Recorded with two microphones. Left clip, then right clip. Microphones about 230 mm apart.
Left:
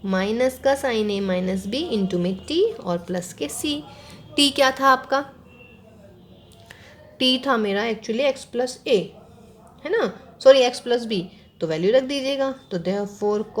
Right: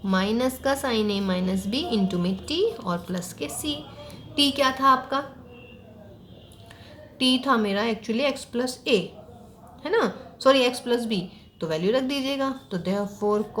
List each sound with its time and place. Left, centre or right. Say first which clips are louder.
0.0 s a woman's voice: left 3 dB; left
7.2 s a woman's voice: left 2 dB; left